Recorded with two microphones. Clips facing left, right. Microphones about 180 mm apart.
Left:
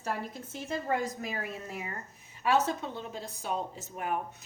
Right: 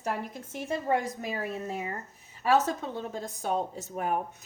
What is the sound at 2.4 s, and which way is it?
Speech, 40° right (ahead or behind).